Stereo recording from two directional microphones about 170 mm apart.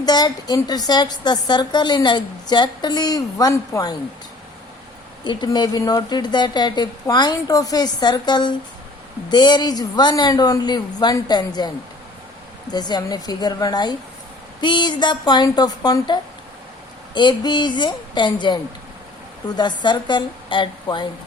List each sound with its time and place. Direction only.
0.0 s a woman's voice: 25° left (ahead or behind)
5.2 s a woman's voice: 25° left (ahead or behind)
12.7 s a woman's voice: 25° left (ahead or behind)